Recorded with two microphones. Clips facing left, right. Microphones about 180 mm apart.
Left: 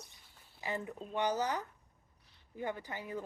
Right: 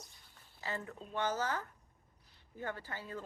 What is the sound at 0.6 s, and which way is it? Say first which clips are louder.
A woman's voice: left 3 dB; 15° left (ahead or behind).